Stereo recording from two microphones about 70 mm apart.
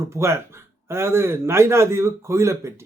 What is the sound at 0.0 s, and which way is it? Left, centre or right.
A man's voice, right.